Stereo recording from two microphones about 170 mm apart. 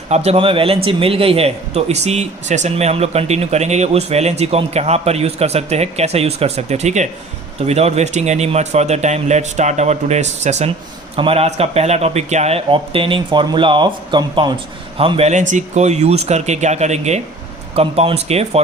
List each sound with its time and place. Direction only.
0.1 s speech: 40° right (ahead or behind)